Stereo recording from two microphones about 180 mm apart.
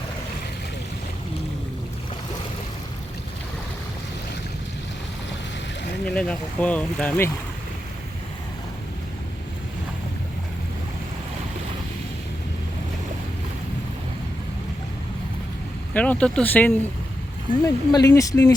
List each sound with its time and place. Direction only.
6.1 s speech: 5° left (ahead or behind)
15.9 s speech: 10° left (ahead or behind)